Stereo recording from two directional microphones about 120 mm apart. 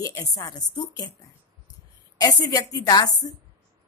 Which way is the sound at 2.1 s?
35° left (ahead or behind).